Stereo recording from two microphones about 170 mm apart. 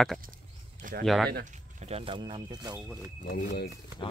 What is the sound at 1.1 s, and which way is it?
Speech, centre (ahead or behind).